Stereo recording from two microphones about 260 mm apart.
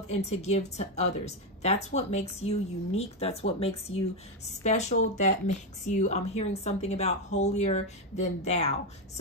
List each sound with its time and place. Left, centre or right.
0.1 s a woman's voice: left
3.9 s speech: left
4.5 s a woman's voice: left